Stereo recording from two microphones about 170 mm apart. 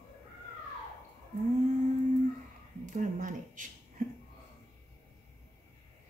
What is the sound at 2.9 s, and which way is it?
Speech, 50° right (ahead or behind).